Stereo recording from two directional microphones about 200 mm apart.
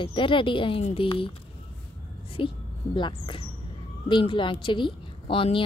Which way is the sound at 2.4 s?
25° left (ahead or behind).